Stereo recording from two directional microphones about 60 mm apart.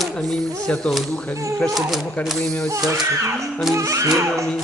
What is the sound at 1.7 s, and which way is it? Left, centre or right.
Speech, centre.